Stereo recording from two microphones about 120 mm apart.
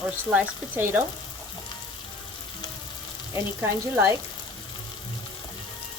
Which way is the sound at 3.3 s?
20° right (ahead or behind).